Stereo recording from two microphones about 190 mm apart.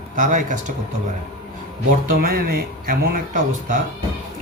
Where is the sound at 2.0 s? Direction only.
50° right (ahead or behind).